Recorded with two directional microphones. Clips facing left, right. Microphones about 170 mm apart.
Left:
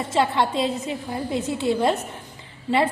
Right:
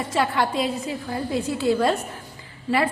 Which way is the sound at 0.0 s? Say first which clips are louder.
Left 1 dB; 25° left (ahead or behind).